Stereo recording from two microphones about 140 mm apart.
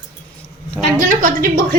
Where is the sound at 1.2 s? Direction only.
90° right.